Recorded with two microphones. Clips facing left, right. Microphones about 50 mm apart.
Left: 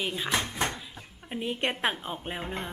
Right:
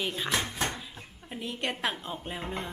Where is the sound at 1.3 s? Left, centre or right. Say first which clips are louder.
Left 4 dB; left.